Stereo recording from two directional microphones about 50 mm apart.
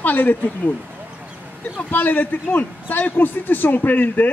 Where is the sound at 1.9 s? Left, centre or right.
Left.